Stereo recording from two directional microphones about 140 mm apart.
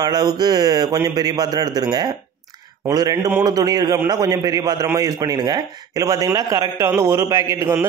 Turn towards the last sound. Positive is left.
turn(degrees=-20)  # may be behind; listen again after turning